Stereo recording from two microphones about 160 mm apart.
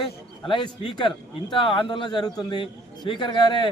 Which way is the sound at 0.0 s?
30° left (ahead or behind).